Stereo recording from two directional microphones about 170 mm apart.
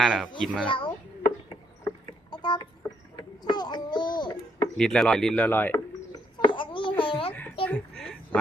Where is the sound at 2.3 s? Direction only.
25° left (ahead or behind).